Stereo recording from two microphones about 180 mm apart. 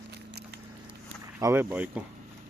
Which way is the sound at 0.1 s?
65° right (ahead or behind).